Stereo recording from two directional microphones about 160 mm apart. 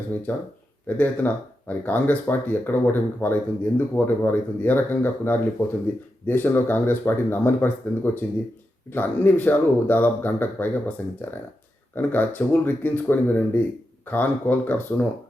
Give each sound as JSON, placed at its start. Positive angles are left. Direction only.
{"t": 0.3, "sound": "speech", "side_deg": 10}